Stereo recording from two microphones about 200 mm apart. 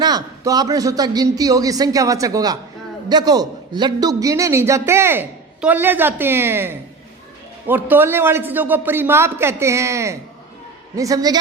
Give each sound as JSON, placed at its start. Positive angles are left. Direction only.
{"t": 0.0, "sound": "a man's voice", "side_deg": -20}